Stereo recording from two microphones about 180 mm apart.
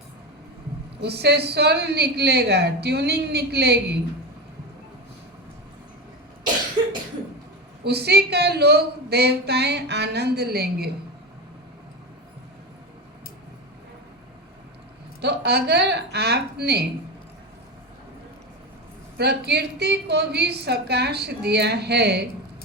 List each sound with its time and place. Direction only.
1.0 s a woman's voice: 65° right (ahead or behind)
7.9 s a woman's voice: 65° right (ahead or behind)
15.2 s a woman's voice: 65° right (ahead or behind)
19.1 s a woman's voice: 65° right (ahead or behind)